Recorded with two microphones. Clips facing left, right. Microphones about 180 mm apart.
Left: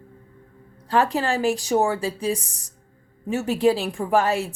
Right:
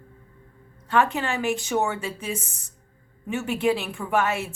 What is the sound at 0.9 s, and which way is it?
A woman's voice, 35° left (ahead or behind).